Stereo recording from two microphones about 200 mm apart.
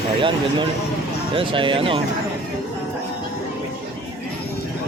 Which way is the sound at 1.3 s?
25° right (ahead or behind).